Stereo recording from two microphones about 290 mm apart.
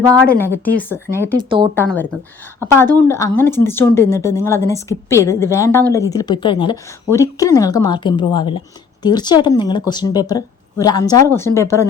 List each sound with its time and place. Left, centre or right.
0.3 s a woman's voice: centre
1.5 s speech: centre
1.7 s a woman's voice: centre